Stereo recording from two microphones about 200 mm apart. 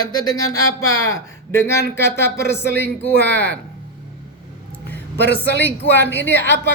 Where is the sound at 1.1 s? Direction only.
15° left (ahead or behind).